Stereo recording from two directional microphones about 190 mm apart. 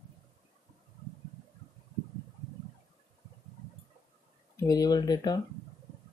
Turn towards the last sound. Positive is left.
turn(degrees=20)  # may be behind; listen again after turning